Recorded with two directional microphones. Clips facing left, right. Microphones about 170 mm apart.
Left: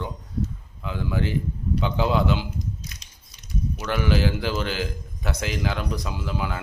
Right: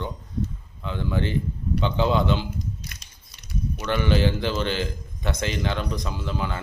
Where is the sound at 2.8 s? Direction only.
60° right (ahead or behind).